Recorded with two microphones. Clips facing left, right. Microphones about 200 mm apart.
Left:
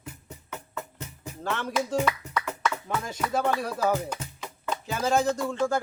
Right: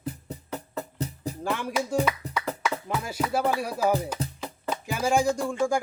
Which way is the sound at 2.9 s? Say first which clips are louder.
Right 1 dB; 10° right (ahead or behind).